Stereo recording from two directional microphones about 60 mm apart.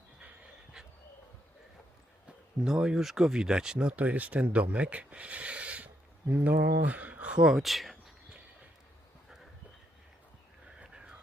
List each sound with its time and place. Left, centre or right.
2.6 s speech: centre
7.4 s speech: centre
10.8 s a sound: centre